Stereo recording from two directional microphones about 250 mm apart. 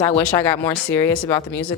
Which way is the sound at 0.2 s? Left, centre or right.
Centre.